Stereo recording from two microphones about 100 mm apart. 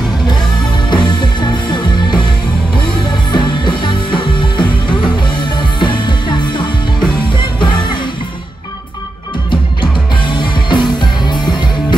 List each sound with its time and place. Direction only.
0.8 s music: 50° left (ahead or behind)
3.3 s music: 50° left (ahead or behind)
9.5 s music: 50° left (ahead or behind)